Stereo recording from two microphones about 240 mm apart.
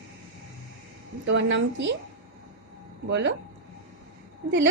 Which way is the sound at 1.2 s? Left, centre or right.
Right.